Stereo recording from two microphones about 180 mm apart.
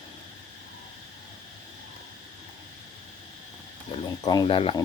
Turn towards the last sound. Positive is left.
turn(degrees=30)  # may be behind; listen again after turning